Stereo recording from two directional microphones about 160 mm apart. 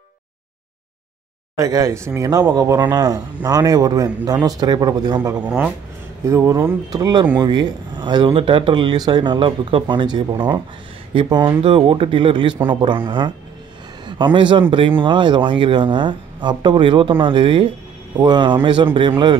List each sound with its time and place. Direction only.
1.6 s speech: 20° right (ahead or behind)
5.4 s speech: 10° right (ahead or behind)
6.2 s a man's voice: 20° right (ahead or behind)